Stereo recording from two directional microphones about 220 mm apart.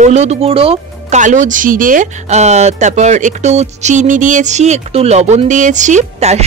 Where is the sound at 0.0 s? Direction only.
30° right (ahead or behind).